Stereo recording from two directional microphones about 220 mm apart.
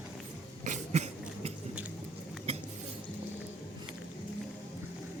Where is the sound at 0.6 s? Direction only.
30° right (ahead or behind).